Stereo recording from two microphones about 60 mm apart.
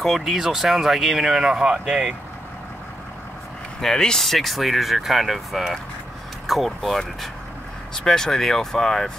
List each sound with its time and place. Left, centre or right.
0.0 s speech: centre
3.8 s speech: centre